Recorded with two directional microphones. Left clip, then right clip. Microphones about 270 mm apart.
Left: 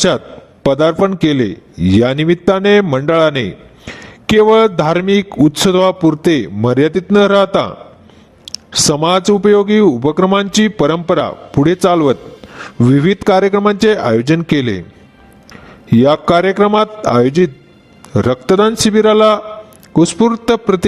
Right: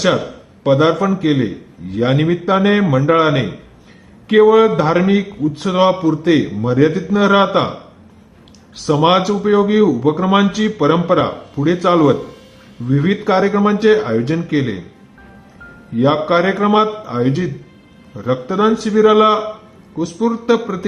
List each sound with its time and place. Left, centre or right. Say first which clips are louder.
0.6 s speech: left 2 dB; left
16.0 s speech: left 4 dB; left